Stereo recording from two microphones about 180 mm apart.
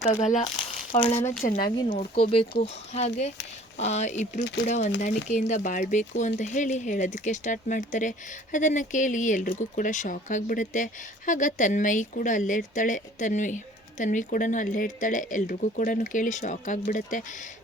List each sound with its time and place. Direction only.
0.0 s speech: 40° left (ahead or behind)
2.9 s speech: 35° left (ahead or behind)